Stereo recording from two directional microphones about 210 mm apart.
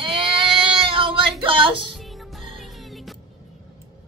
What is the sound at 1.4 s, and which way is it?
Music, 25° right (ahead or behind).